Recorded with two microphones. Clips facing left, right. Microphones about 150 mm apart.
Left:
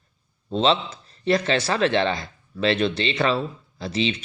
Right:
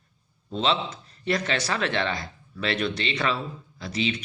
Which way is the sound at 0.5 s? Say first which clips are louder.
Left 5 dB; 35° left (ahead or behind).